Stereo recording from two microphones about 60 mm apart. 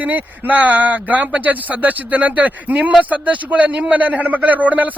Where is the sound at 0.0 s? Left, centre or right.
Right.